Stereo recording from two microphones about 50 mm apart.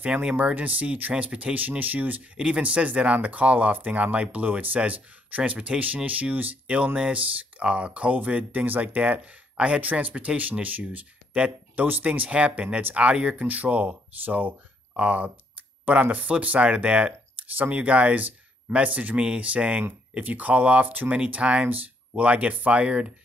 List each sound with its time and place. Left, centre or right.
0.0 s speech: right
0.6 s speech: right
2.3 s speech: right
11.7 s speech: right
13.4 s speech: right
19.8 s speech: right